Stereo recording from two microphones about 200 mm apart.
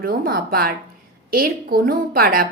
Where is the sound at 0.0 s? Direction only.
50° right (ahead or behind).